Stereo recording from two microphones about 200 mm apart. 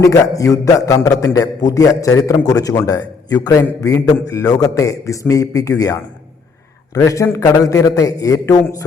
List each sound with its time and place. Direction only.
0.1 s a man's voice: 15° left (ahead or behind)